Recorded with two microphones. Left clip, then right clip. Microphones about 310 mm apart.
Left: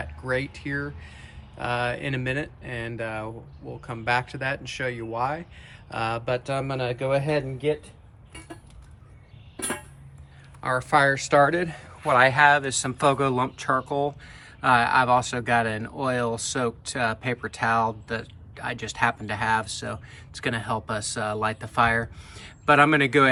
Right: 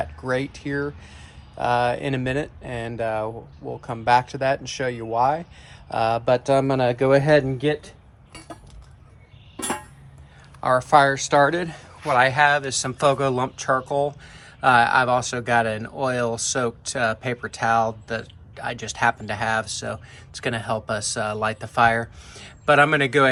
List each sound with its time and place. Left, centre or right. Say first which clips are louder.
0.0 s speech: right 3 dB; centre; by 7.8 s right
10.6 s speech: right 5 dB; centre